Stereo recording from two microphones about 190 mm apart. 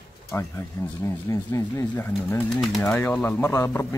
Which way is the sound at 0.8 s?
20° left (ahead or behind).